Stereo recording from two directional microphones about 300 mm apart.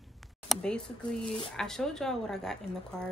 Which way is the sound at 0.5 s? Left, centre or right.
Centre.